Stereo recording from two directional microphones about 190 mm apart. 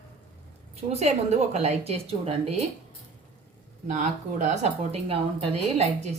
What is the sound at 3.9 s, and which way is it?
Speech, 40° right (ahead or behind).